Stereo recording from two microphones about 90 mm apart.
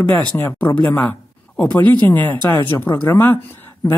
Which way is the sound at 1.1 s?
20° left (ahead or behind).